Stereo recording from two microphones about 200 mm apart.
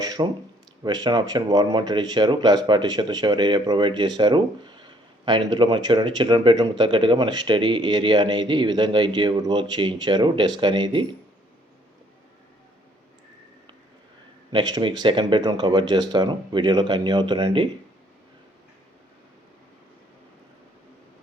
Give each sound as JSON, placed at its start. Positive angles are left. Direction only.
{"t": 0.0, "sound": "a sound", "side_deg": -20}
{"t": 0.9, "sound": "speech", "side_deg": -20}
{"t": 14.5, "sound": "speech", "side_deg": -20}